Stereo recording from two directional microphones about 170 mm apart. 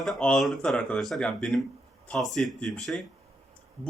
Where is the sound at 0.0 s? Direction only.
5° left (ahead or behind).